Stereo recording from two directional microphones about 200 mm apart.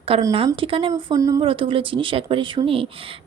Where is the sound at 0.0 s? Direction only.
25° right (ahead or behind).